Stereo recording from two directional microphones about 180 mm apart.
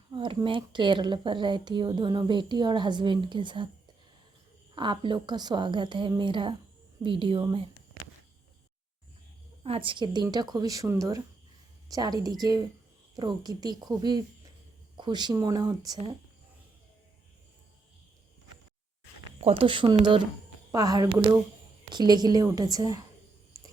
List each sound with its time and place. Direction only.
0.1 s a woman's voice: 25° right (ahead or behind)
4.7 s a woman's voice: 25° right (ahead or behind)
9.6 s a woman's voice: 30° right (ahead or behind)
19.4 s a woman's voice: 30° right (ahead or behind)